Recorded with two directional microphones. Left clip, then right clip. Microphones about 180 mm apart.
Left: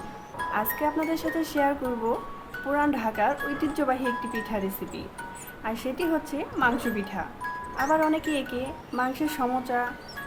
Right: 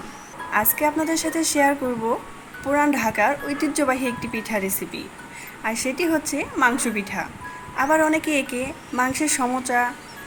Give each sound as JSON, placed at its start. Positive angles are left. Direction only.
{"t": 0.5, "sound": "speech", "side_deg": -15}
{"t": 5.6, "sound": "speech", "side_deg": -15}